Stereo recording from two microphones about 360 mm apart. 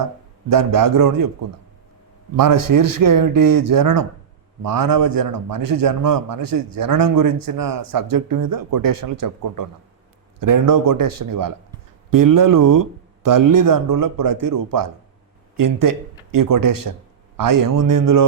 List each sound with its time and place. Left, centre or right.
0.5 s a man's voice: right